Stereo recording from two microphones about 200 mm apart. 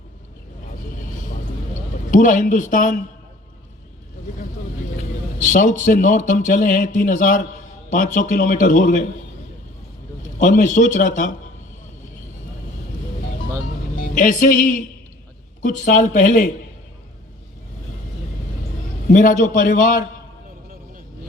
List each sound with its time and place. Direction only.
2.0 s speech: 40° left (ahead or behind)
5.4 s speech: 40° left (ahead or behind)
10.2 s speech: 40° left (ahead or behind)
14.2 s speech: 40° left (ahead or behind)
19.1 s speech: 40° left (ahead or behind)